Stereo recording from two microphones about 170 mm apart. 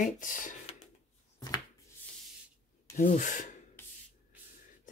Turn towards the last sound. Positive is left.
turn(degrees=50)  # may be behind; listen again after turning